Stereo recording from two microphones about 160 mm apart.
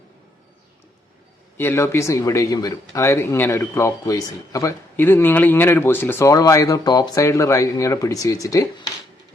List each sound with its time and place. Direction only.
1.5 s speech: 15° left (ahead or behind)